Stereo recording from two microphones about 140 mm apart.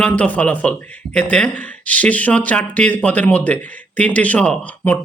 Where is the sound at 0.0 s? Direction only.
10° left (ahead or behind).